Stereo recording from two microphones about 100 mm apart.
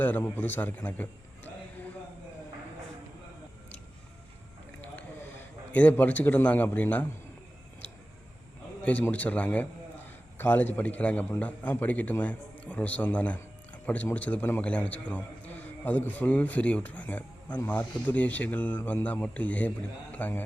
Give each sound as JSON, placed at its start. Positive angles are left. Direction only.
{"t": 0.0, "sound": "a man's voice", "side_deg": 15}
{"t": 5.7, "sound": "a man's voice", "side_deg": 15}
{"t": 8.8, "sound": "a man's voice", "side_deg": 15}